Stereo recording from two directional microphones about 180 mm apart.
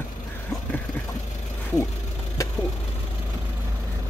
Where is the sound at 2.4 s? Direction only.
15° left (ahead or behind).